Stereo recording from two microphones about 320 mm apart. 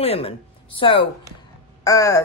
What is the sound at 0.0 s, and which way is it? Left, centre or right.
A woman's voice, centre.